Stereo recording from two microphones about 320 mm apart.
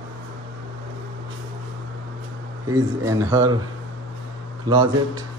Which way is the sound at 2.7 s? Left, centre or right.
Centre.